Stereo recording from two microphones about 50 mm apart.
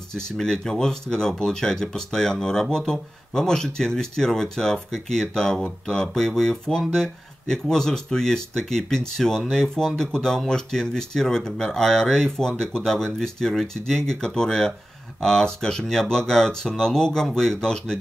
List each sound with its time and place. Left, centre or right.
0.1 s speech: centre